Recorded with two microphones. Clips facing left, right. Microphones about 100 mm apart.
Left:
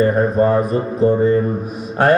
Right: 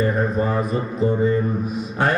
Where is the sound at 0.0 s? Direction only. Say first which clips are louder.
Left 6 dB; 50° left (ahead or behind).